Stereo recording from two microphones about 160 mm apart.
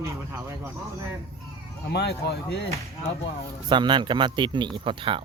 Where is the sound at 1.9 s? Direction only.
85° left.